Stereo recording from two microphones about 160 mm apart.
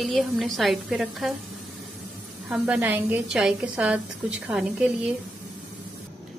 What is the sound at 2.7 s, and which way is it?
Speech, 15° right (ahead or behind).